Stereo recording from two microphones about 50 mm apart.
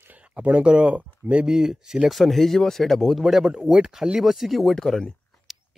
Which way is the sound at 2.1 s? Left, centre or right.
Centre.